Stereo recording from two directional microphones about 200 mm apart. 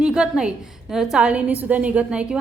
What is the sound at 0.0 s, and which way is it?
A woman's voice, 5° right (ahead or behind).